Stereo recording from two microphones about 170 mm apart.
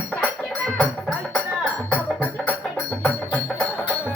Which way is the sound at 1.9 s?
10° left (ahead or behind).